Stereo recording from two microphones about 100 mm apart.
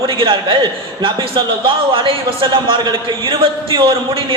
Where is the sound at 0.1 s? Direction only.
55° right (ahead or behind).